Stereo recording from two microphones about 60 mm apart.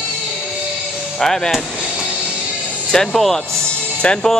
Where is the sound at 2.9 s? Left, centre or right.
Centre.